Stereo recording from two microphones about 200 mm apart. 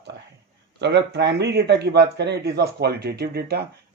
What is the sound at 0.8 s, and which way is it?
Speech, 60° right (ahead or behind).